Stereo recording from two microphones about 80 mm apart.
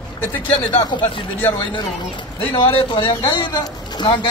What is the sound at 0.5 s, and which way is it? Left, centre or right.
Speech, left.